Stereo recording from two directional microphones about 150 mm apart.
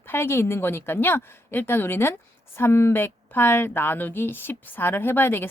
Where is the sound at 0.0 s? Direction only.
15° left (ahead or behind).